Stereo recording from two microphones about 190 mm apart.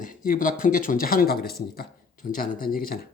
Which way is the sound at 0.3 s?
45° left (ahead or behind).